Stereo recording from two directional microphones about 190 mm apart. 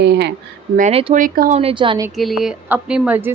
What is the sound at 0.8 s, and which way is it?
Speech, 35° right (ahead or behind).